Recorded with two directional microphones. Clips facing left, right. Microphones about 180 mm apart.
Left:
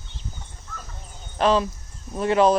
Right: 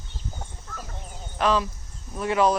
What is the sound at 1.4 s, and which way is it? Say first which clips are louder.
Speech: left 3 dB; 30° left (ahead or behind).